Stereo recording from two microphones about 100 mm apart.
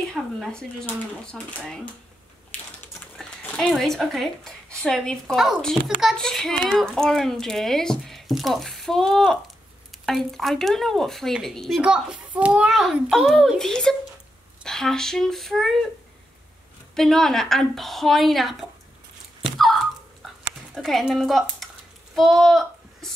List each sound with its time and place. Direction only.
0.0 s speech: 5° left (ahead or behind)
2.5 s typing: 15° left (ahead or behind)
3.2 s a child's voice: 5° left (ahead or behind)
11.8 s a child's voice: 10° right (ahead or behind)
12.7 s a child's voice: centre (ahead or behind)
16.9 s a child's voice: 5° left (ahead or behind)
19.6 s a sound: centre (ahead or behind)
20.7 s a woman's voice: centre (ahead or behind)